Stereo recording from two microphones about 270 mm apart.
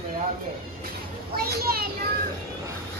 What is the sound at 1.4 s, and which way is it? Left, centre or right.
Speech, right.